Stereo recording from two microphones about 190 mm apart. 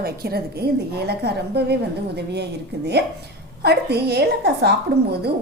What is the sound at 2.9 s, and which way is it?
A woman's voice, 60° right (ahead or behind).